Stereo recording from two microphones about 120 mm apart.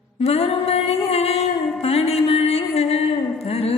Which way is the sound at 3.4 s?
55° left (ahead or behind).